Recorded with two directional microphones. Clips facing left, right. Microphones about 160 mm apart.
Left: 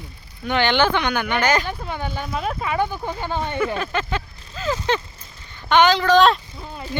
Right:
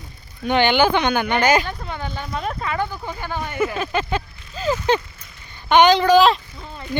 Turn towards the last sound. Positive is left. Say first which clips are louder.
# right 1 dB
turn(degrees=0)  # may be behind; listen again after turning